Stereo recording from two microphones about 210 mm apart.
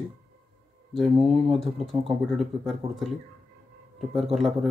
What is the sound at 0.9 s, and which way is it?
A man's voice, centre (ahead or behind).